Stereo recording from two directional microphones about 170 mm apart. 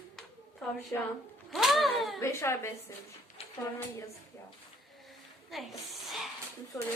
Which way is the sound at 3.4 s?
35° left (ahead or behind).